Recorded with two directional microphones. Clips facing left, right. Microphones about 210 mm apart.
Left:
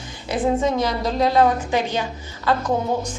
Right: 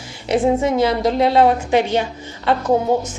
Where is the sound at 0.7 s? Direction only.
25° right (ahead or behind).